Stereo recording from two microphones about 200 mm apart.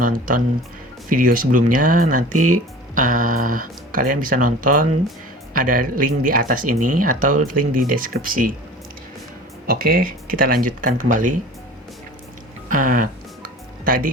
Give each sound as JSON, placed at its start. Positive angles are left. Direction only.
{"t": 0.0, "sound": "speech", "side_deg": -45}
{"t": 2.3, "sound": "speech", "side_deg": -90}
{"t": 2.9, "sound": "speech", "side_deg": -40}
{"t": 9.6, "sound": "speech", "side_deg": -45}
{"t": 12.6, "sound": "music", "side_deg": -40}